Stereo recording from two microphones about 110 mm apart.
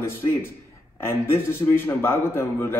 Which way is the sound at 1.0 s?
20° left (ahead or behind).